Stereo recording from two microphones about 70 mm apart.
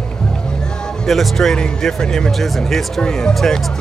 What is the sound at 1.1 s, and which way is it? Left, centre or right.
Speech, centre.